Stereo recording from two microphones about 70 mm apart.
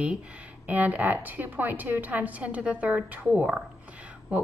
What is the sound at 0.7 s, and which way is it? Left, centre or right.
A woman's voice, right.